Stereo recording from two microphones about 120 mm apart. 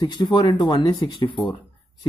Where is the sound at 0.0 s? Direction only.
35° left (ahead or behind).